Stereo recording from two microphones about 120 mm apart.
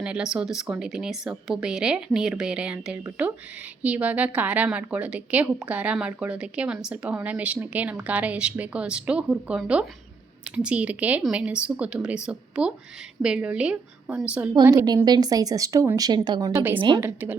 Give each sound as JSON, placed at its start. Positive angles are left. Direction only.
{"t": 0.0, "sound": "a woman's voice", "side_deg": -5}
{"t": 15.0, "sound": "a woman's voice", "side_deg": -35}
{"t": 16.6, "sound": "a woman's voice", "side_deg": -15}